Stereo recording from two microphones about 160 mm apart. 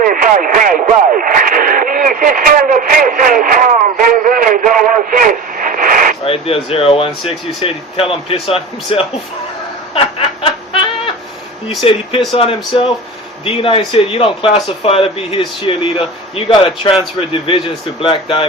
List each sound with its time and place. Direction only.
0.0 s radio: 60° right (ahead or behind)
6.2 s speech: 35° left (ahead or behind)
9.9 s snicker: 35° left (ahead or behind)
11.8 s speech: 35° left (ahead or behind)